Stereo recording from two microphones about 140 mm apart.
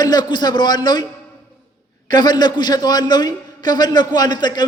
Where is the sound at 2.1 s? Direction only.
30° left (ahead or behind).